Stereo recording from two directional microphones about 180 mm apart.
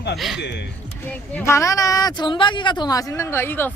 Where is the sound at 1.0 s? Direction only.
10° left (ahead or behind).